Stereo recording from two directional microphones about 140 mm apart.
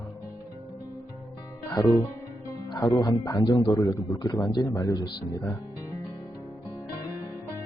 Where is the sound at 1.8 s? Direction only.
20° left (ahead or behind).